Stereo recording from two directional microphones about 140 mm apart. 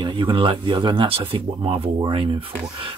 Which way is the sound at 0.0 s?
35° right (ahead or behind).